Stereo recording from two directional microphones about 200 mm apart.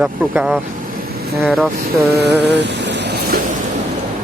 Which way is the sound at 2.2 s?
60° right (ahead or behind).